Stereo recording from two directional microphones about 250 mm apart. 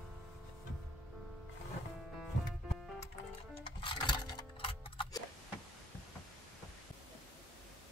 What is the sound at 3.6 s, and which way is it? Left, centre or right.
Music, centre.